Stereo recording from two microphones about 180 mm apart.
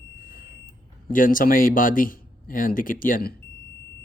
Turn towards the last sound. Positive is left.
turn(degrees=55)  # may be behind; listen again after turning